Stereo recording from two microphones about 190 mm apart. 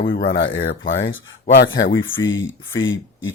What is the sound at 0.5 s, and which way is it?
Speech, 75° left (ahead or behind).